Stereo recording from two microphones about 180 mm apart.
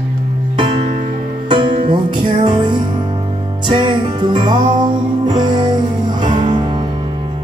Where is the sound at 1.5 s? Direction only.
25° right (ahead or behind).